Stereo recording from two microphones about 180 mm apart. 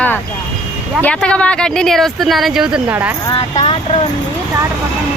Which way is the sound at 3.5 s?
30° left (ahead or behind).